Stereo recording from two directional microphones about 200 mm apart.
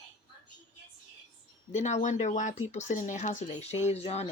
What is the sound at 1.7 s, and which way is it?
Speech, 35° left (ahead or behind).